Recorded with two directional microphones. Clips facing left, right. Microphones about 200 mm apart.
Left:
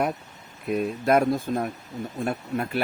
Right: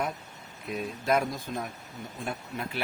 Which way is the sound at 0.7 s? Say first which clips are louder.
Left 6 dB; 55° left (ahead or behind).